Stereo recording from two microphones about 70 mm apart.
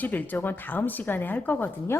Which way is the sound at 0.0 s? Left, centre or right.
Left.